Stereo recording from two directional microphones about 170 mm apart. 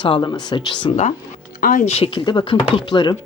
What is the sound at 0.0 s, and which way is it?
Speech, 30° left (ahead or behind).